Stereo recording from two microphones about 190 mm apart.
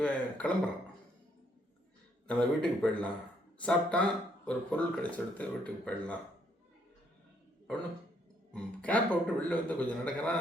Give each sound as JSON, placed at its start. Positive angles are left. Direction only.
{"t": 0.0, "sound": "speech", "side_deg": 5}
{"t": 2.2, "sound": "speech", "side_deg": 5}
{"t": 8.5, "sound": "speech", "side_deg": 5}